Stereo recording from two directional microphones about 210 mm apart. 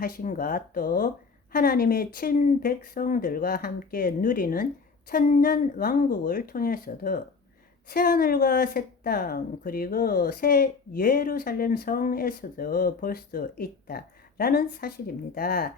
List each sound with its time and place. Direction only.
0.0 s a woman's voice: 40° left (ahead or behind)